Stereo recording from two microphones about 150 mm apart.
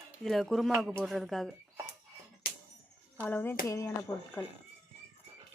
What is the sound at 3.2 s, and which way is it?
Speech, 15° left (ahead or behind).